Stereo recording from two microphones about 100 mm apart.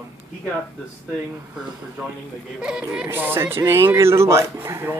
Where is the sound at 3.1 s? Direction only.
25° right (ahead or behind).